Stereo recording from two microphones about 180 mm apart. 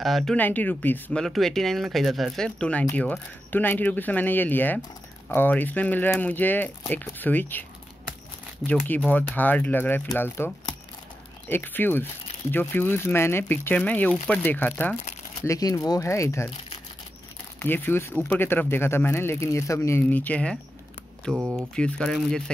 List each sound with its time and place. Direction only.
0.0 s speech: centre (ahead or behind)
8.8 s speech: 10° left (ahead or behind)
15.4 s speech: 20° left (ahead or behind)
17.6 s speech: 10° left (ahead or behind)
21.3 s speech: 10° right (ahead or behind)
21.7 s speech: 5° left (ahead or behind)